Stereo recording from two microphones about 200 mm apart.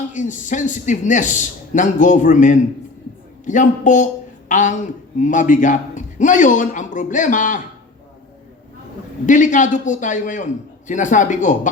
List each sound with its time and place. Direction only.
0.1 s a man's voice: 40° left (ahead or behind)
9.2 s a man's voice: 40° left (ahead or behind)